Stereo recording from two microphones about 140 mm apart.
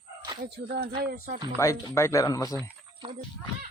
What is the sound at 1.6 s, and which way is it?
Speech, 20° left (ahead or behind).